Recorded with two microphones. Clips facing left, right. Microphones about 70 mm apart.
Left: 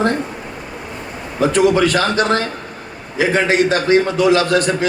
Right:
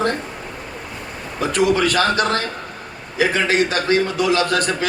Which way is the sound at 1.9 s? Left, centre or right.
Left.